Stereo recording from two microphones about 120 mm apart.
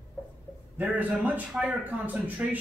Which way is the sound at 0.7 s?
10° right (ahead or behind).